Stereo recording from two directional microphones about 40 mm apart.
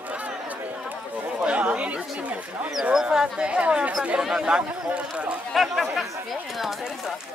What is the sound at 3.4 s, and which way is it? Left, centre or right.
Speech, right.